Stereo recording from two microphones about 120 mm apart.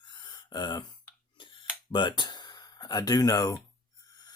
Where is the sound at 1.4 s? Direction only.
40° left (ahead or behind).